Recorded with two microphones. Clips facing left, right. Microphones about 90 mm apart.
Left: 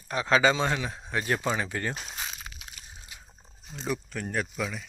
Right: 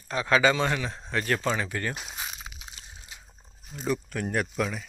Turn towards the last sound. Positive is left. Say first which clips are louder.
# right 3 dB
turn(degrees=-5)  # may be behind; listen again after turning